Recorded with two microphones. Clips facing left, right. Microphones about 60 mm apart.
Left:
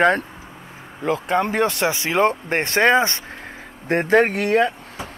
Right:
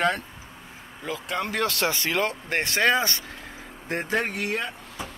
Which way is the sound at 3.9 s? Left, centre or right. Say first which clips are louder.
Left 10 dB; left.